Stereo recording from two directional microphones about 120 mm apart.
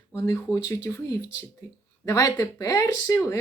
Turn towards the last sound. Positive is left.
turn(degrees=25)  # may be behind; listen again after turning